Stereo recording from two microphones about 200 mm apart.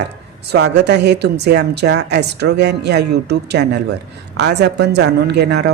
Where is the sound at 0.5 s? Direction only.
60° right (ahead or behind).